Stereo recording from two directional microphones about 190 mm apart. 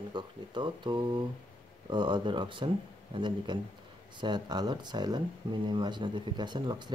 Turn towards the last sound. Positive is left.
turn(degrees=-25)  # may be behind; listen again after turning